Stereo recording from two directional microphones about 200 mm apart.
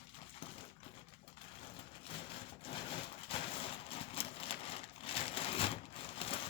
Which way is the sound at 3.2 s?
30° left (ahead or behind).